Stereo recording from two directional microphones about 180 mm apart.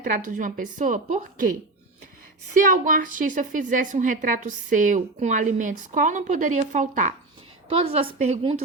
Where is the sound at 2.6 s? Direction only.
50° right (ahead or behind).